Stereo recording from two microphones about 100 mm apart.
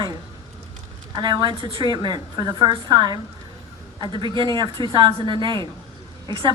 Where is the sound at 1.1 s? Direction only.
45° right (ahead or behind).